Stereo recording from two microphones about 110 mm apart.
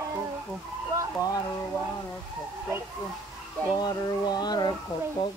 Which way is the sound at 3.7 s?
40° left (ahead or behind).